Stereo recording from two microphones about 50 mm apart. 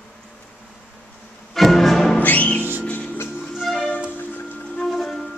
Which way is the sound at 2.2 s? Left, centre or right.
Left.